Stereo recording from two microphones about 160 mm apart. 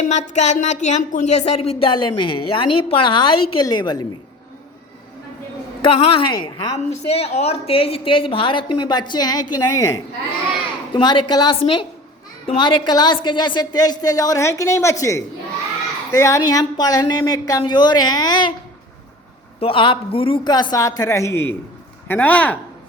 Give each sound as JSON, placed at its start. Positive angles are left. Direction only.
{"t": 0.1, "sound": "speech", "side_deg": 45}
{"t": 5.8, "sound": "a woman's voice", "side_deg": 35}
{"t": 19.5, "sound": "a woman's voice", "side_deg": 35}